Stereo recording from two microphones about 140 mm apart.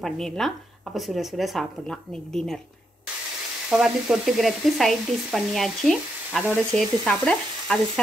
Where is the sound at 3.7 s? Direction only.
5° right (ahead or behind).